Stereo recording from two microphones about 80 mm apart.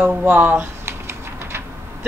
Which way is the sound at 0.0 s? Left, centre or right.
Right.